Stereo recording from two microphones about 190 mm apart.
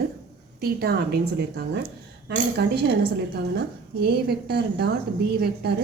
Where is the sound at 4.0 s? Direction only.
60° right (ahead or behind).